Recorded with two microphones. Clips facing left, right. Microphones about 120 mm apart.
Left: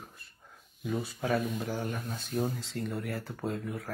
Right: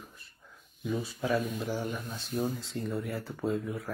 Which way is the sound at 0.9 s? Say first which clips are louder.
Right 1 dB; 55° left (ahead or behind).